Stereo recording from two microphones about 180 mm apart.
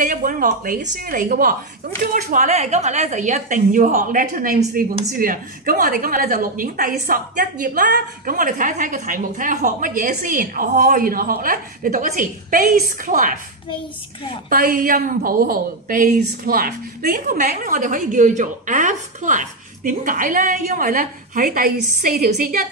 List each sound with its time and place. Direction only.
0.0 s a woman's voice: 45° right (ahead or behind)
14.5 s a woman's voice: 50° right (ahead or behind)